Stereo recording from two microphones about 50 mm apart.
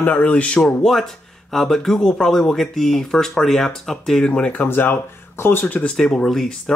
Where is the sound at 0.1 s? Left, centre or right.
Left.